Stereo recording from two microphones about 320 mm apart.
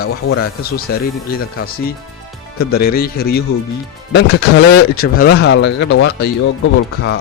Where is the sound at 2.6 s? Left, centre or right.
Left.